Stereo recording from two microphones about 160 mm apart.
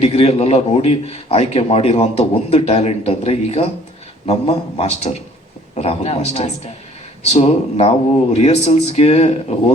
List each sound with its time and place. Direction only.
0.0 s a man's voice: 40° left (ahead or behind)